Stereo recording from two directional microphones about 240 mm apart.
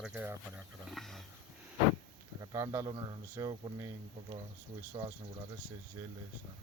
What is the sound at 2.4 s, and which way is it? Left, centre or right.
Speech, centre.